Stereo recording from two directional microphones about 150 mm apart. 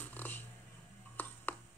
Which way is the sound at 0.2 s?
10° left (ahead or behind).